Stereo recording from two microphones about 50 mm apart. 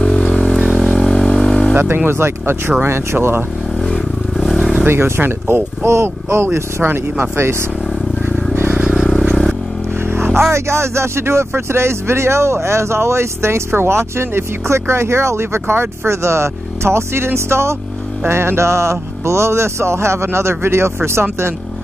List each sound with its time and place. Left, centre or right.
0.0 s vehicle: centre
2.0 s speech: right
3.8 s vehicle: centre
4.8 s speech: right
5.9 s speech: right
9.2 s vehicle: centre
10.1 s vehicle: right
10.5 s speech: right